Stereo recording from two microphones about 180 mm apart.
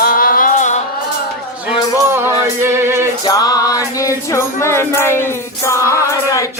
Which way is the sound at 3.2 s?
20° left (ahead or behind).